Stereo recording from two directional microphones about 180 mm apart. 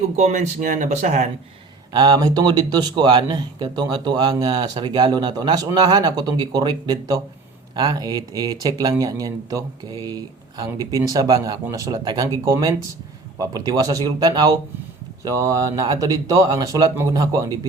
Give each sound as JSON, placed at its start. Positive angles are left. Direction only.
{"t": 0.2, "sound": "speech", "side_deg": -40}
{"t": 1.9, "sound": "speech", "side_deg": -20}